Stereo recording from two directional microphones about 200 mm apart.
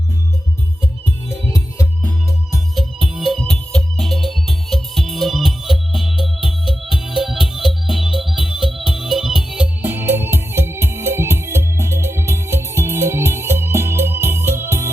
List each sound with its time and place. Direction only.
1.3 s music: 15° left (ahead or behind)
2.0 s music: centre (ahead or behind)